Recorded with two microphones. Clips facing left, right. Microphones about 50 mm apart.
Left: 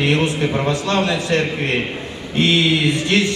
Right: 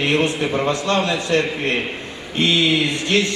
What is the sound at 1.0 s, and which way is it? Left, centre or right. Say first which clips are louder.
Speech: left 1 dB; left.